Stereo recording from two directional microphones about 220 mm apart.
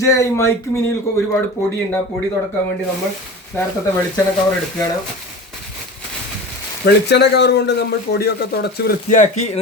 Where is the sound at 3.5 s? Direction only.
10° left (ahead or behind).